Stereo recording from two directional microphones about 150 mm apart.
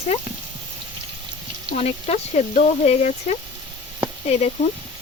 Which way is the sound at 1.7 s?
45° left (ahead or behind).